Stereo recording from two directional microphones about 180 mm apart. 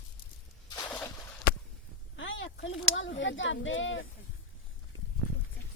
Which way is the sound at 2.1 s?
90° left.